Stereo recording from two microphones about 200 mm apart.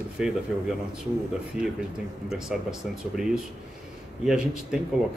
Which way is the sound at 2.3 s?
Centre (ahead or behind).